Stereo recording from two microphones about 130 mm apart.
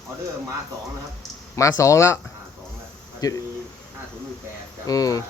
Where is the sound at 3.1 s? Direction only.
25° left (ahead or behind).